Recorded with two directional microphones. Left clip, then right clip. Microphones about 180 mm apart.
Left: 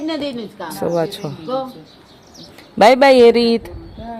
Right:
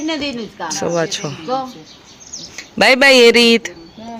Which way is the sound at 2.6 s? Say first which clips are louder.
Left 1 dB; 10° left (ahead or behind).